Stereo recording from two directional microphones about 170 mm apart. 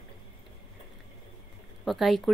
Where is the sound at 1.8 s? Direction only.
Centre (ahead or behind).